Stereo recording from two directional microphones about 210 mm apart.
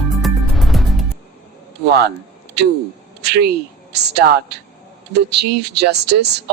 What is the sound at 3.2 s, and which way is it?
A woman's voice, 50° right (ahead or behind).